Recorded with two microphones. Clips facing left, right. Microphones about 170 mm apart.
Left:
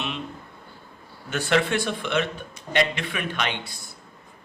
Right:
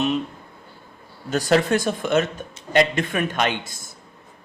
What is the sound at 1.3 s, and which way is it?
Speech, 40° right (ahead or behind).